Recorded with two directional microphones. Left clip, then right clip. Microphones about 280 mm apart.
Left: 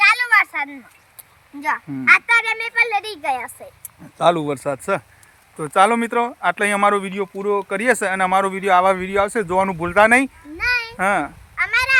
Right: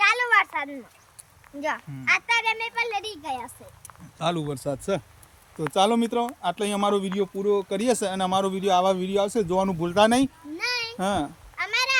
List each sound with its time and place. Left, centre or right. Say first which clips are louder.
0.0 s a sound: left 6 dB; centre
1.6 s a woman's voice: left 9 dB; centre
5.5 s speech: left 6 dB; left
10.6 s a sound: left 8 dB; centre
10.9 s speech: left 8 dB; left
11.5 s cat: left 7 dB; centre